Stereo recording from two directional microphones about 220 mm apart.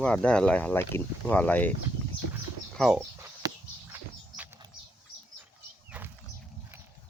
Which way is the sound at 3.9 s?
15° right (ahead or behind).